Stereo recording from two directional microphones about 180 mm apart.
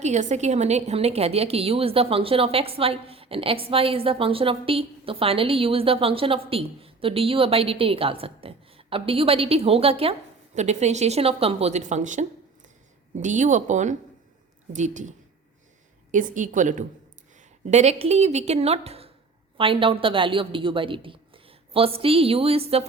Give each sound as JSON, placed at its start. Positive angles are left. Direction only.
{"t": 0.0, "sound": "a woman's voice", "side_deg": -40}
{"t": 16.1, "sound": "a woman's voice", "side_deg": -45}